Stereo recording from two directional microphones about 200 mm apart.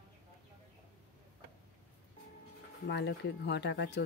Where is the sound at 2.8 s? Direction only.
60° left (ahead or behind).